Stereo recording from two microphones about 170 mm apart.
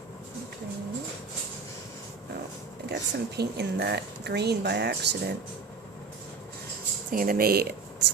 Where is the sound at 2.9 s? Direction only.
75° right (ahead or behind).